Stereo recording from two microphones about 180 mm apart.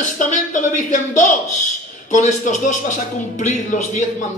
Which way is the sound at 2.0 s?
40° left (ahead or behind).